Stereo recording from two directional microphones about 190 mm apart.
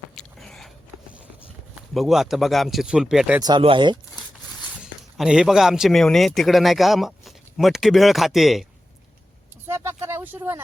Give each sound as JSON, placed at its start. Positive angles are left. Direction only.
{"t": 0.2, "sound": "biting", "side_deg": 0}
{"t": 1.9, "sound": "speech", "side_deg": 0}
{"t": 3.4, "sound": "speech", "side_deg": -25}
{"t": 4.8, "sound": "speech", "side_deg": -5}
{"t": 9.6, "sound": "a sound", "side_deg": -15}